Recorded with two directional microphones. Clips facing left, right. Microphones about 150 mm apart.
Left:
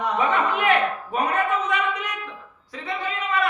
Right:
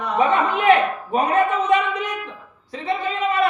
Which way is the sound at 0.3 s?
25° right (ahead or behind).